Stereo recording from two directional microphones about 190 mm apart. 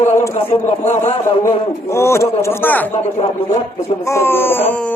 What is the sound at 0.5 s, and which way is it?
Speech, 35° left (ahead or behind).